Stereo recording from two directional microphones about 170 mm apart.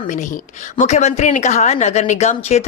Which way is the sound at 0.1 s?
45° left (ahead or behind).